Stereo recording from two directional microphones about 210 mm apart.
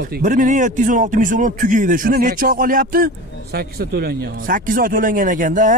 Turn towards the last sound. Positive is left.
turn(degrees=-40)  # may be behind; listen again after turning